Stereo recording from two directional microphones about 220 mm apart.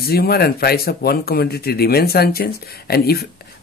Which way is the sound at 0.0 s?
45° left (ahead or behind).